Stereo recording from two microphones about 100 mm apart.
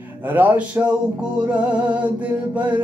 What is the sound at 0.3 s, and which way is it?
Music, 15° right (ahead or behind).